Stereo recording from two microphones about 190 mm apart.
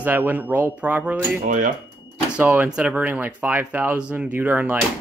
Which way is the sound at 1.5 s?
45° right (ahead or behind).